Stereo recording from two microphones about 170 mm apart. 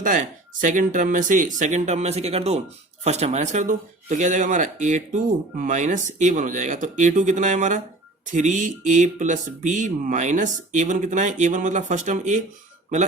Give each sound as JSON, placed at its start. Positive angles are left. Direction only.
{"t": 0.0, "sound": "speech", "side_deg": -50}